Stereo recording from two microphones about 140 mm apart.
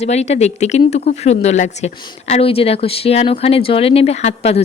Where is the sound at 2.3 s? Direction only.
45° left (ahead or behind).